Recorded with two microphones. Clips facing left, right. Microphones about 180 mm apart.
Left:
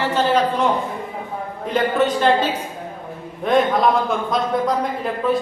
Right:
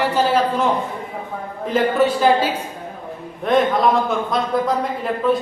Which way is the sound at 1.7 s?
5° right (ahead or behind).